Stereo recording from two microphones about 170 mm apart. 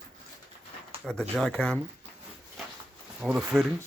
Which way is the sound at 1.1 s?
5° left (ahead or behind).